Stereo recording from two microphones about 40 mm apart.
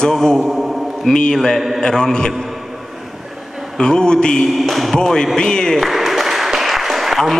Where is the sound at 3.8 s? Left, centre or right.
Centre.